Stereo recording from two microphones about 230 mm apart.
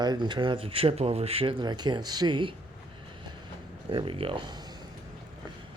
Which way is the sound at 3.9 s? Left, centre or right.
Right.